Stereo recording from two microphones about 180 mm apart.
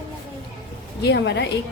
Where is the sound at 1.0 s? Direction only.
70° left (ahead or behind).